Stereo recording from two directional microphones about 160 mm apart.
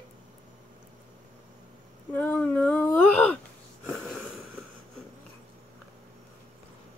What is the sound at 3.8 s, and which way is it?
Wheeze, centre (ahead or behind).